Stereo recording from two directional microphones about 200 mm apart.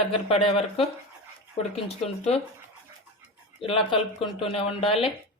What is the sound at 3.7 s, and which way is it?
Speech, 25° left (ahead or behind).